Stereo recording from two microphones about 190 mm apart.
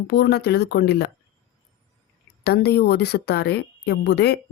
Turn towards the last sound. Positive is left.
turn(degrees=60)  # may be behind; listen again after turning